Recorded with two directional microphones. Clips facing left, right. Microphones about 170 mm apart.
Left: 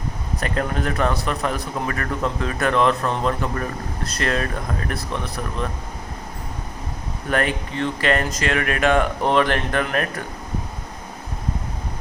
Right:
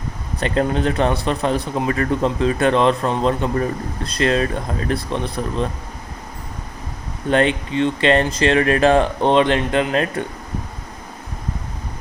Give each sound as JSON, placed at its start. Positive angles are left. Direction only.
{"t": 0.3, "sound": "speech", "side_deg": -30}
{"t": 7.3, "sound": "speech", "side_deg": -25}